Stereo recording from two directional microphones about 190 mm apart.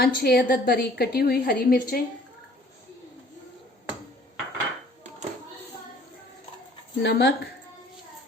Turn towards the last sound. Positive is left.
turn(degrees=65)  # may be behind; listen again after turning